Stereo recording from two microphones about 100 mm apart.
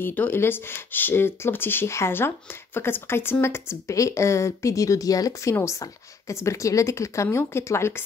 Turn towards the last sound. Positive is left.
turn(degrees=25)  # may be behind; listen again after turning